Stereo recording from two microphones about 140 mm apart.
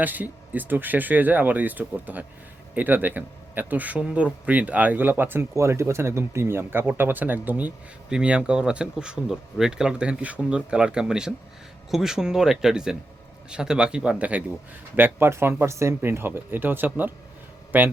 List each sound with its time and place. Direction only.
0.0 s speech: 10° right (ahead or behind)